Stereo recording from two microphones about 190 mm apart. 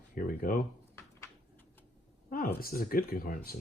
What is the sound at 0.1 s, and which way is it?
Speech, 45° left (ahead or behind).